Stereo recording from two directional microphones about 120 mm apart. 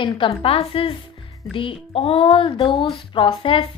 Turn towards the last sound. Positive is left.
turn(degrees=50)  # may be behind; listen again after turning